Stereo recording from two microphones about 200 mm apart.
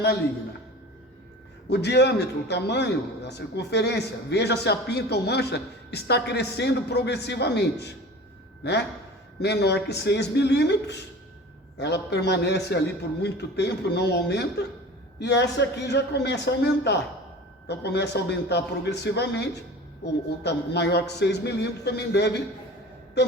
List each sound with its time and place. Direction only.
1.7 s a man's voice: 55° left (ahead or behind)
9.4 s a man's voice: 55° left (ahead or behind)